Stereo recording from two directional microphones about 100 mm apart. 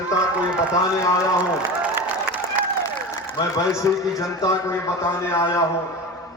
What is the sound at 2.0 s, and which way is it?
Applause, 20° right (ahead or behind).